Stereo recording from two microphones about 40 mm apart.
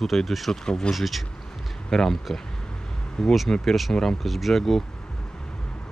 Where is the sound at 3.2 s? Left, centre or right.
Centre.